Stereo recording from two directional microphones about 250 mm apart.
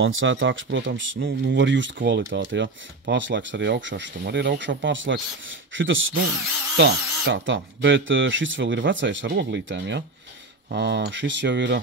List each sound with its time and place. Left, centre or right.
0.0 s speech: right